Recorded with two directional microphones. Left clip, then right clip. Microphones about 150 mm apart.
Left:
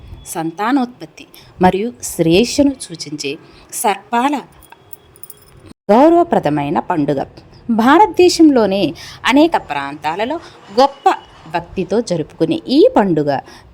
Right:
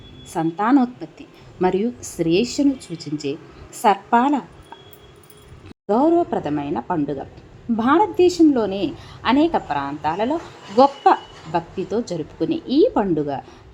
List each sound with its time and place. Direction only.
0.3 s a woman's voice: 25° left (ahead or behind)
5.8 s a woman's voice: 35° left (ahead or behind)